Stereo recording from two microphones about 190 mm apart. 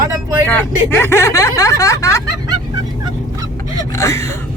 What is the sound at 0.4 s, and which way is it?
Speech, 10° left (ahead or behind).